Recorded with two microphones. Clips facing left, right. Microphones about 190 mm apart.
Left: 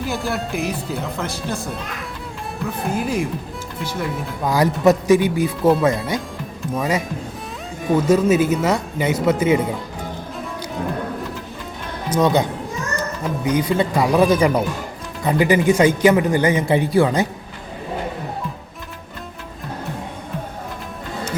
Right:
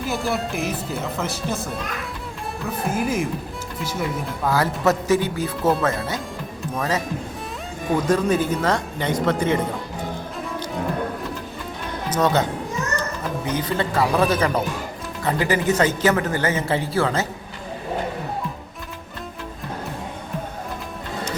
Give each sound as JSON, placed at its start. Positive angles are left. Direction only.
{"t": 0.0, "sound": "speech", "side_deg": 0}
{"t": 2.9, "sound": "speech", "side_deg": -5}
{"t": 4.4, "sound": "speech", "side_deg": 15}
{"t": 12.1, "sound": "speech", "side_deg": 10}